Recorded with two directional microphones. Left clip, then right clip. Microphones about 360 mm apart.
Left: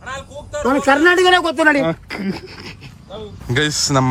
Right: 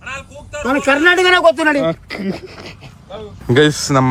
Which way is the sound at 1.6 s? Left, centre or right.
Centre.